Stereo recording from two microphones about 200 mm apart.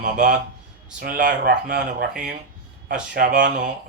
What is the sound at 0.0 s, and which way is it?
Speech, 40° right (ahead or behind).